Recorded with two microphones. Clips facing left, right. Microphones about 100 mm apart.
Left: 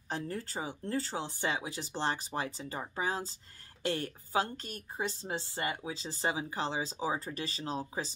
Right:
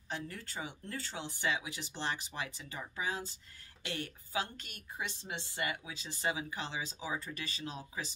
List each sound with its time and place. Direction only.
0.1 s a woman's voice: 35° left (ahead or behind)